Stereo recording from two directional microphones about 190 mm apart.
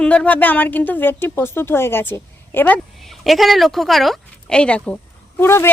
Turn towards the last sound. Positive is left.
turn(degrees=10)  # may be behind; listen again after turning